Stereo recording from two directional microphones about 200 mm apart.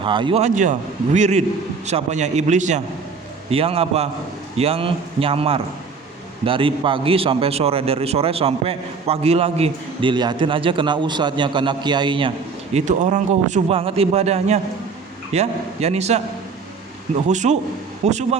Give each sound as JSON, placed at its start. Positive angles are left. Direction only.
{"t": 0.0, "sound": "a man's voice", "side_deg": -25}
{"t": 0.4, "sound": "a man's voice", "side_deg": -40}
{"t": 12.7, "sound": "a man's voice", "side_deg": -40}
{"t": 17.2, "sound": "a man's voice", "side_deg": -35}